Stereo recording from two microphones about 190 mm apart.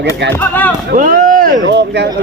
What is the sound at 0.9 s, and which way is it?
Speech, 45° right (ahead or behind).